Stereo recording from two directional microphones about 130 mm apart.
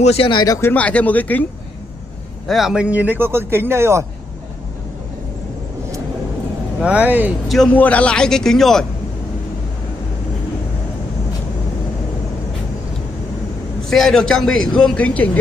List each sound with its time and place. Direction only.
0.0 s speech: 50° left (ahead or behind)
0.6 s speech: 15° left (ahead or behind)
2.4 s speech: centre (ahead or behind); by 4.0 s 20° right (ahead or behind)
6.8 s speech: 10° right (ahead or behind)
7.4 s a man's voice: centre (ahead or behind)
13.8 s a man's voice: centre (ahead or behind)